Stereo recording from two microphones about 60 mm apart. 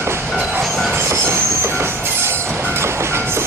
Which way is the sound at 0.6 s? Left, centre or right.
Centre.